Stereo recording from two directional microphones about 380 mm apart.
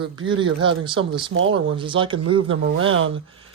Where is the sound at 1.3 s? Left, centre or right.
Right.